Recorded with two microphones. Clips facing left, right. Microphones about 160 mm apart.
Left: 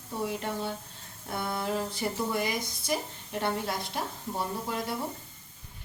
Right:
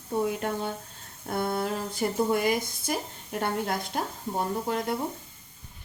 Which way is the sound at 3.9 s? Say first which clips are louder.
Right 4 dB; 50° right (ahead or behind).